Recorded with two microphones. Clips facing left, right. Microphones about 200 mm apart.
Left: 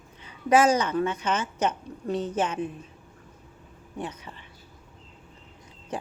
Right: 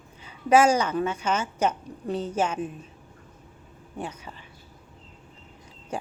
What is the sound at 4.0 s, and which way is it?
Speech, 30° right (ahead or behind).